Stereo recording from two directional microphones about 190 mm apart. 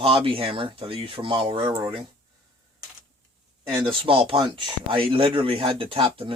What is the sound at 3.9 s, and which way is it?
Speech, 30° right (ahead or behind).